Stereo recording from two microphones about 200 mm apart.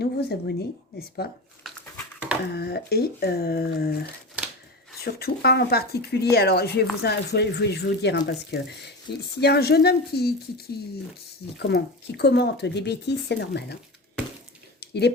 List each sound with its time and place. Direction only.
0.0 s speech: 55° left (ahead or behind)
2.5 s speech: 55° left (ahead or behind)
5.0 s speech: 55° left (ahead or behind)
11.6 s speech: 55° left (ahead or behind)
14.8 s a sound: 55° left (ahead or behind)